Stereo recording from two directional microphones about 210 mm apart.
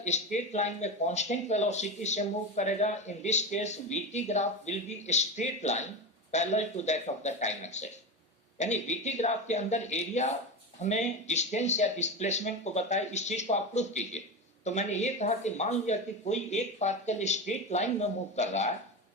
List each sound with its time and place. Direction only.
0.0 s speech: 35° left (ahead or behind)